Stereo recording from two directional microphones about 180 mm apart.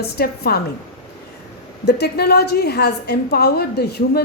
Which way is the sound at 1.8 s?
65° left (ahead or behind).